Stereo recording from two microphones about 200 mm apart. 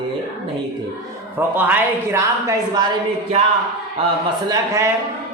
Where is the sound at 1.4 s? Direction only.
10° right (ahead or behind).